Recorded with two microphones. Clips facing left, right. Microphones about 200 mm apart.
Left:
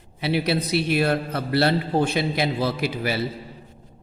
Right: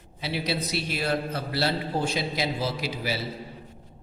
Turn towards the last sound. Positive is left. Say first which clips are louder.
# left 5 dB
turn(degrees=60)  # may be behind; listen again after turning